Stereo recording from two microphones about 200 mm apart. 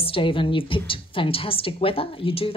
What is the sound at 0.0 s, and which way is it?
A woman's voice, 25° left (ahead or behind).